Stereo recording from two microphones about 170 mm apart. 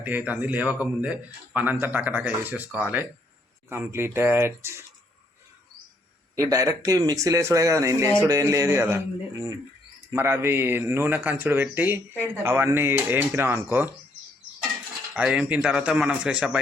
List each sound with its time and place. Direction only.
0.0 s speech: 10° right (ahead or behind)
6.3 s speech: 20° right (ahead or behind)
15.1 s speech: 5° right (ahead or behind)